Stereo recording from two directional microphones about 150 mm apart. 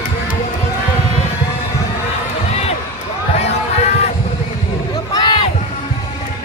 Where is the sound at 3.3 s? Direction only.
45° left (ahead or behind).